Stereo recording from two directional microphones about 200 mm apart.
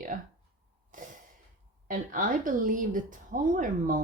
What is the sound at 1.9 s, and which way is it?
Speech, 40° right (ahead or behind).